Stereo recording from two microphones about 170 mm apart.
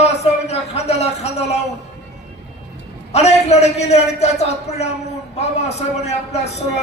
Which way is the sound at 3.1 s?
40° left (ahead or behind).